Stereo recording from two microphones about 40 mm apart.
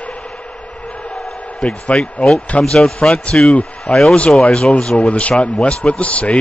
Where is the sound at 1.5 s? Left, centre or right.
Centre.